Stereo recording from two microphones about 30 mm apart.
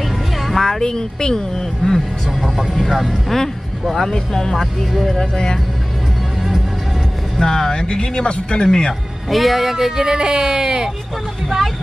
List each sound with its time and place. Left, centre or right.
0.0 s music: centre
0.8 s speech: left
1.9 s speech: centre
3.3 s speech: centre
7.4 s speech: centre
9.3 s speech: centre
10.0 s speech: right
11.4 s speech: centre